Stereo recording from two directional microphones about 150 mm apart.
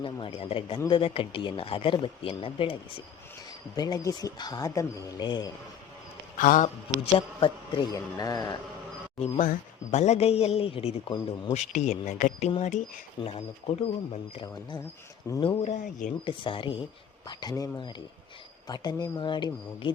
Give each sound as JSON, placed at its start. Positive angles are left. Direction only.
{"t": 0.0, "sound": "speech", "side_deg": 35}
{"t": 3.8, "sound": "speech", "side_deg": 25}
{"t": 6.3, "sound": "a man's voice", "side_deg": 60}
{"t": 7.0, "sound": "speech", "side_deg": 35}
{"t": 9.1, "sound": "speech", "side_deg": 40}
{"t": 9.4, "sound": "speech", "side_deg": 55}
{"t": 11.5, "sound": "speech", "side_deg": 50}
{"t": 14.4, "sound": "speech", "side_deg": 30}
{"t": 15.6, "sound": "speech", "side_deg": 55}
{"t": 16.2, "sound": "speech", "side_deg": 35}